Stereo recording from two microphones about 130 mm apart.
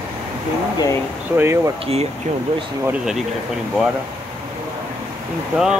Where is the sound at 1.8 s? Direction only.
50° right (ahead or behind).